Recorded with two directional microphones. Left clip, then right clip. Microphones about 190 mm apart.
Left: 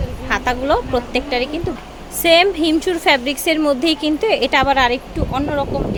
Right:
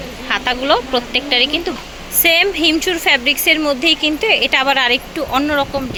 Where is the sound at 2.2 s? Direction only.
20° left (ahead or behind); by 5.7 s centre (ahead or behind).